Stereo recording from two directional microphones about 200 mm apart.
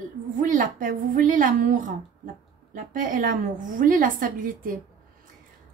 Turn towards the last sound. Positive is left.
turn(degrees=-40)  # may be behind; listen again after turning